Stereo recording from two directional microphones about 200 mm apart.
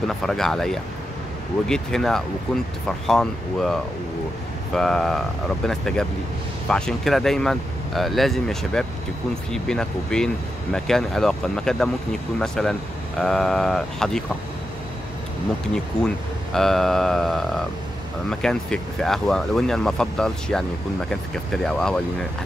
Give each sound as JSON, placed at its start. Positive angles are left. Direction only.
{"t": 0.2, "sound": "speech", "side_deg": 0}
{"t": 16.5, "sound": "speech", "side_deg": 0}
{"t": 21.6, "sound": "speech", "side_deg": 5}